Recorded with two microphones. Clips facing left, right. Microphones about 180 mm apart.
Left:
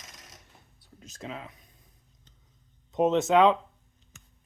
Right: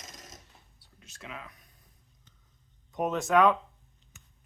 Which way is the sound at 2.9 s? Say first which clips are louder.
Left 4 dB; 25° left (ahead or behind).